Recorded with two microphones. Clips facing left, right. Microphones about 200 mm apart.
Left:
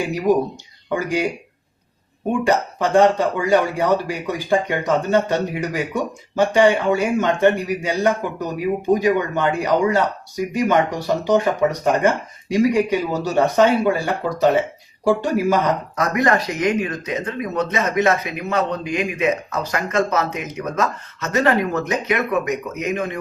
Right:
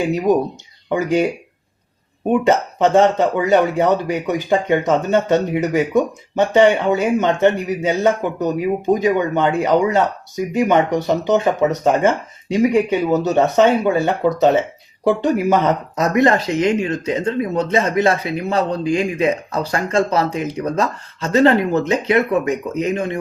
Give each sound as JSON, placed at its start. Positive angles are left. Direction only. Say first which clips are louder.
{"t": 0.9, "sound": "speech", "louder": "right 4 dB", "side_deg": -20}
{"t": 2.3, "sound": "speech", "louder": "right 3 dB", "side_deg": -20}